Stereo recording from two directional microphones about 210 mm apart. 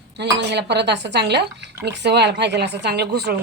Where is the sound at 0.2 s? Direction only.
50° right (ahead or behind).